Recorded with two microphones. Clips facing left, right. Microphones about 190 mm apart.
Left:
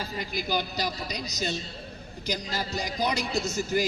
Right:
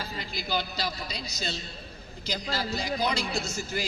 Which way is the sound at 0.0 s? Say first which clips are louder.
Left 4 dB; 15° left (ahead or behind).